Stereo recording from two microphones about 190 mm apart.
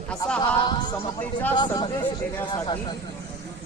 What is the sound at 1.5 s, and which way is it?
Speech, 25° left (ahead or behind).